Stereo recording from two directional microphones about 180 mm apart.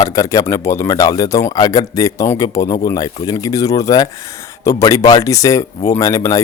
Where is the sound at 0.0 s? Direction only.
20° left (ahead or behind).